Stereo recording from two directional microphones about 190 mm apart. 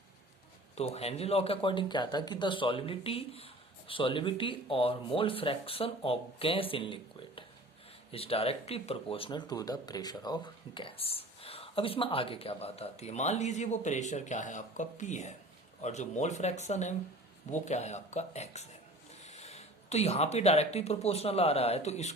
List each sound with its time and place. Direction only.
0.8 s speech: 35° left (ahead or behind)